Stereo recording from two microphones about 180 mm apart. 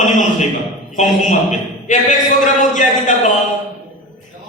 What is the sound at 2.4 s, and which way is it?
Speech, 45° left (ahead or behind).